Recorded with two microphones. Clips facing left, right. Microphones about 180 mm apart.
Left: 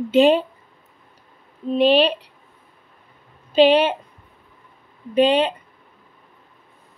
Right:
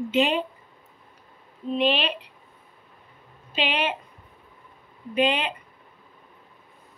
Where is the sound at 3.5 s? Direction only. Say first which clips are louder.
Left 12 dB; 35° left (ahead or behind).